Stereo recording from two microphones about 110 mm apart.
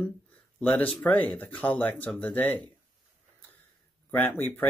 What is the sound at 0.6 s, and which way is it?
Speech, 10° left (ahead or behind).